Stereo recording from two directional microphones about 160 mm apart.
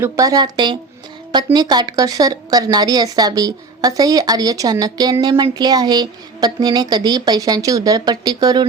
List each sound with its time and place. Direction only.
0.0 s a woman's voice: 20° right (ahead or behind)